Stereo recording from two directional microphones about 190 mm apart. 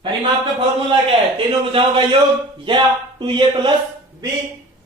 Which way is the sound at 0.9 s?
30° right (ahead or behind).